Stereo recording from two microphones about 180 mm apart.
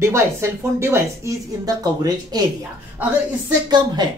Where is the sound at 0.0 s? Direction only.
15° right (ahead or behind).